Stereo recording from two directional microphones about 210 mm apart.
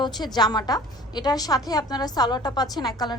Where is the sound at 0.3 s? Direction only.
20° left (ahead or behind).